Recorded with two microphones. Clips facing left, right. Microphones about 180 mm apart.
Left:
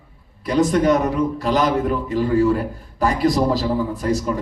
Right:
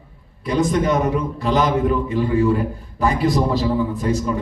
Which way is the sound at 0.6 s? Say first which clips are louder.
Left 2 dB; 35° left (ahead or behind).